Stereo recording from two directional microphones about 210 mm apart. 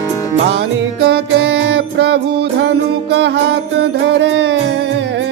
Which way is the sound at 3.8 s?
55° right (ahead or behind).